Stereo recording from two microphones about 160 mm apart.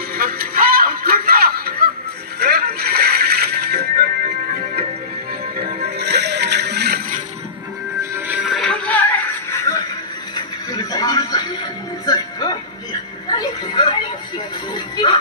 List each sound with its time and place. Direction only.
0.1 s a sound: 70° right (ahead or behind)
2.4 s music: 75° right (ahead or behind)
5.6 s music: 90° right
8.0 s music: 15° right (ahead or behind)
8.4 s music: centre (ahead or behind); by 9.8 s 15° left (ahead or behind)
10.3 s television: 20° left (ahead or behind)
12.1 s music: 25° left (ahead or behind)